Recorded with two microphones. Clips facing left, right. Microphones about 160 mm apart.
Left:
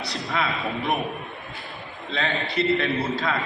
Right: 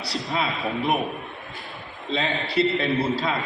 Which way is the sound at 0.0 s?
35° right (ahead or behind).